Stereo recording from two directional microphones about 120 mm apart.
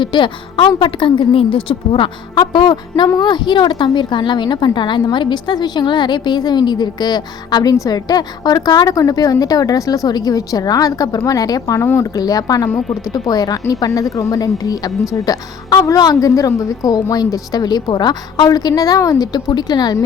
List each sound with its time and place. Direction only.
0.0 s a woman's voice: 40° left (ahead or behind)